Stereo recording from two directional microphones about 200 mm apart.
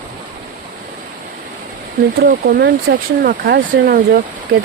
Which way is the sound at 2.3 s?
60° right (ahead or behind).